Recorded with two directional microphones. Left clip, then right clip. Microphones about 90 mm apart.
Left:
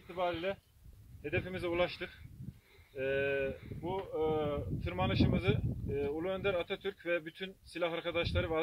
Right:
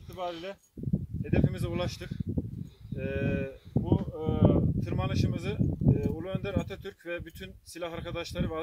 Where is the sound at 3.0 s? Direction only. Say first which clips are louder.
Left 1 dB; 20° left (ahead or behind).